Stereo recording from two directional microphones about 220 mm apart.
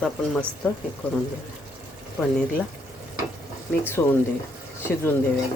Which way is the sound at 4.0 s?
10° left (ahead or behind).